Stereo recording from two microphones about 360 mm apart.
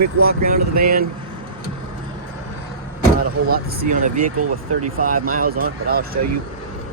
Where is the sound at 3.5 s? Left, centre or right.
Right.